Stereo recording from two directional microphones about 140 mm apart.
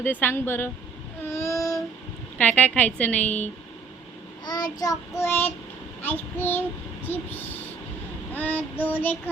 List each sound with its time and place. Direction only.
0.0 s a child's voice: 15° left (ahead or behind)
1.3 s child singing: 20° left (ahead or behind)
2.4 s a child's voice: 10° left (ahead or behind)
4.4 s child singing: 30° left (ahead or behind)
6.0 s a child's voice: 15° left (ahead or behind)
8.3 s child singing: 10° left (ahead or behind)
8.8 s a child's voice: 15° left (ahead or behind)